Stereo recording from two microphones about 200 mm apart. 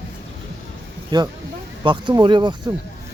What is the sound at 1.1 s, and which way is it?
Speech, 20° right (ahead or behind).